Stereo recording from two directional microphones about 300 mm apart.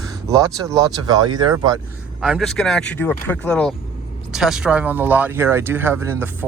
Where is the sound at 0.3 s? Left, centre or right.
Centre.